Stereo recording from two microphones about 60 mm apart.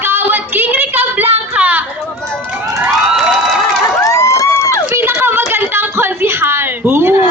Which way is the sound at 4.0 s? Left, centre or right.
Left.